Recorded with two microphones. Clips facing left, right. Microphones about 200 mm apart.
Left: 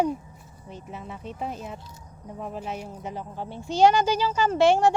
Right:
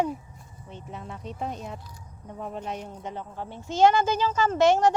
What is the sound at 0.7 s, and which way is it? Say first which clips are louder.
Speech: left 1 dB; 5° left (ahead or behind).